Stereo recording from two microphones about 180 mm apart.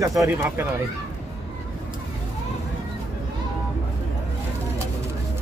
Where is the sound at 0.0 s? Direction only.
20° right (ahead or behind).